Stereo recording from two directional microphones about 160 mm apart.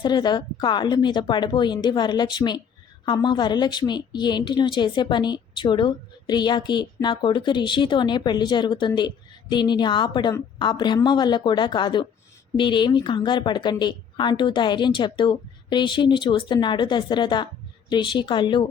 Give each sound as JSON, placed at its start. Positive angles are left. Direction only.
{"t": 0.0, "sound": "a woman's voice", "side_deg": 25}